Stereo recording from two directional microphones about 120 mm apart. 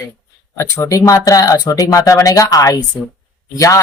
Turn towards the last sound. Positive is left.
turn(degrees=25)  # may be behind; listen again after turning